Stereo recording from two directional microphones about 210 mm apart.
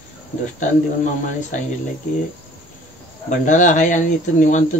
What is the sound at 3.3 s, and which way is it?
Speech, 35° left (ahead or behind).